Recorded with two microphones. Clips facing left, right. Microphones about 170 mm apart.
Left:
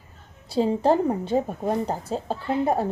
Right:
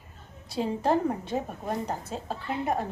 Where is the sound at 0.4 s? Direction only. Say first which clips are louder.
Left 6 dB; 30° left (ahead or behind).